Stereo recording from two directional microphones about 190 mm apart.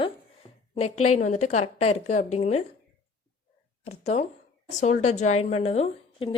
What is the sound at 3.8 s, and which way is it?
A woman's voice, 35° left (ahead or behind).